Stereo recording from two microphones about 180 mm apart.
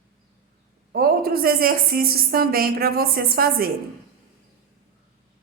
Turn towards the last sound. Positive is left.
turn(degrees=-55)  # may be behind; listen again after turning